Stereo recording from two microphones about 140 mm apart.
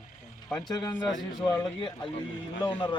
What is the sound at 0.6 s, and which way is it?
A man's voice, 30° left (ahead or behind).